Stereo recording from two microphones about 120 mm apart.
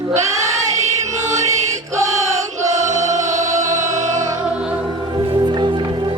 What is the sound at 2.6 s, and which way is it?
Choir, 80° right.